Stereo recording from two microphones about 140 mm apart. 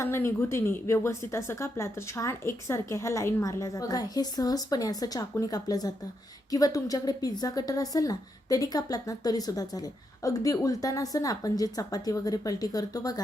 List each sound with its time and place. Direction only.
0.0 s a woman's voice: 20° left (ahead or behind)